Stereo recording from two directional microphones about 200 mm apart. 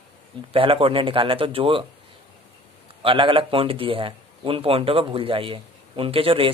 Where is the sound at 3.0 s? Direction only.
25° right (ahead or behind).